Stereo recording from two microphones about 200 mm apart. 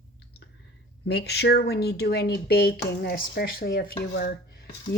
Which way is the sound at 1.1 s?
55° left (ahead or behind).